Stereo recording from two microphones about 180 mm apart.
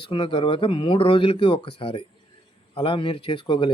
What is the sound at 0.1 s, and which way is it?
Speech, 30° left (ahead or behind).